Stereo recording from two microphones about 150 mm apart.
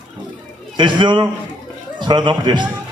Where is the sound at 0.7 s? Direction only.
30° right (ahead or behind).